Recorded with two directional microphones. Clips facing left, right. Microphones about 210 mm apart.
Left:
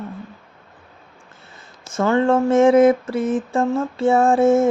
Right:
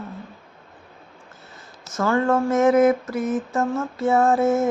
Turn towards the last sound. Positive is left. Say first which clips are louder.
# left 4 dB
turn(degrees=30)  # may be behind; listen again after turning